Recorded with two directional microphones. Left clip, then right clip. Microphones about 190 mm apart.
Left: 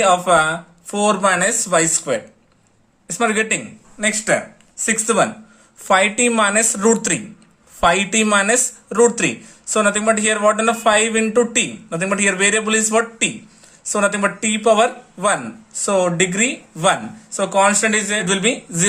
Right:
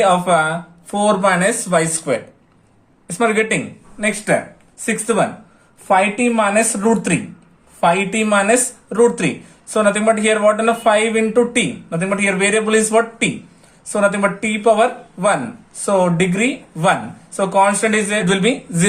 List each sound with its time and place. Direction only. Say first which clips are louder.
0.0 s speech: even; 25° left (ahead or behind)